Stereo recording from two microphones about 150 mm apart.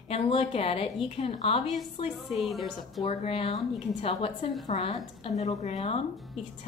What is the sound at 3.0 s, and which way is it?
A woman's voice, 40° left (ahead or behind).